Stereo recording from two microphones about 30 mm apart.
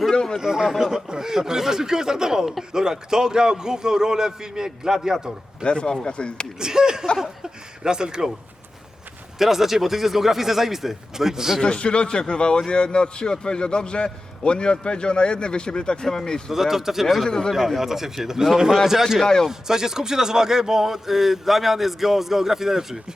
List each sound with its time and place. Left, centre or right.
0.1 s a sound: left
0.3 s a man's voice: centre
5.6 s a man's voice: left
6.6 s a man's voice: right
7.2 s a sound: right
9.4 s speech: centre
11.6 s a man's voice: left
16.0 s speech: centre
16.5 s speech: centre
17.2 s speech: left
17.5 s speech: centre
17.7 s speech: centre
19.2 s speech: centre
19.5 s speech: centre